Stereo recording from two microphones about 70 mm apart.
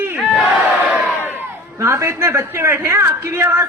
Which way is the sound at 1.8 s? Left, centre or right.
Right.